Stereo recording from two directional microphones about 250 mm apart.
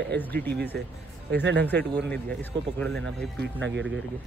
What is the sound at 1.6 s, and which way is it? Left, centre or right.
Speech, centre.